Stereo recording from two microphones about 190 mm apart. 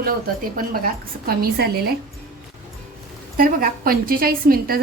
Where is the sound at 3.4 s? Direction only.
50° right (ahead or behind).